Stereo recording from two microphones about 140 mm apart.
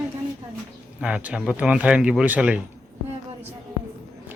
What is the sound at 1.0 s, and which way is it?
Speech, 5° right (ahead or behind).